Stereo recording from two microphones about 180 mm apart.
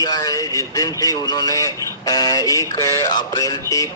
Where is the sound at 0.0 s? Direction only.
20° left (ahead or behind).